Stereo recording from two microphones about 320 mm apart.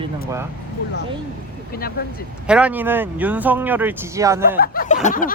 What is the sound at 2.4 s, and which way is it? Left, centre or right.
Speech, centre.